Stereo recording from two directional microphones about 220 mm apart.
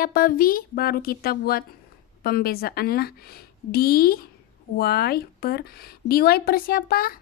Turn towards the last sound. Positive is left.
turn(degrees=40)  # may be behind; listen again after turning